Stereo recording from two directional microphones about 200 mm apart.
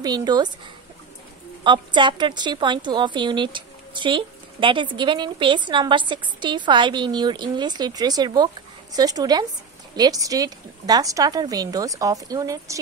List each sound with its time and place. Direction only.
0.0 s a woman's voice: 20° right (ahead or behind)
1.6 s a woman's voice: 25° right (ahead or behind)